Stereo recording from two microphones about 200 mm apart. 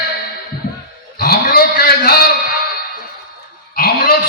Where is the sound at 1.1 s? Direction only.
50° left (ahead or behind).